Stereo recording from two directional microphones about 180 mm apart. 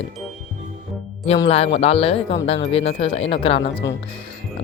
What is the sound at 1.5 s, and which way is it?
Speech, 35° left (ahead or behind).